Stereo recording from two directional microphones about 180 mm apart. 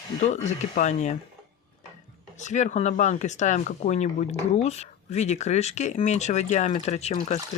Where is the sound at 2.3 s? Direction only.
40° left (ahead or behind).